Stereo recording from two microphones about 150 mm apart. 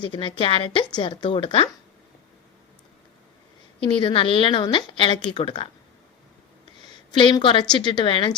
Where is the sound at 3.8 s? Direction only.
35° left (ahead or behind).